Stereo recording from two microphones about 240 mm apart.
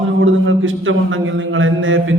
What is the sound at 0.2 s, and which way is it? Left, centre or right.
A man's voice, right.